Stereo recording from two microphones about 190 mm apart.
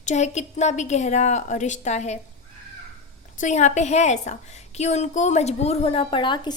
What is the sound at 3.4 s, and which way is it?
A woman's voice, 40° left (ahead or behind).